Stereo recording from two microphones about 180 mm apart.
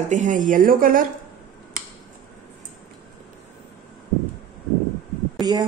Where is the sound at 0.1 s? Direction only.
45° right (ahead or behind).